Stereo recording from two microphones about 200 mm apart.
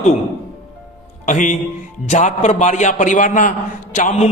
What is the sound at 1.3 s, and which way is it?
A man's voice, 40° left (ahead or behind).